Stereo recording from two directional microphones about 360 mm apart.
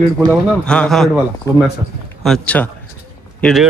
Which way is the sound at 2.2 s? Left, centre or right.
Centre.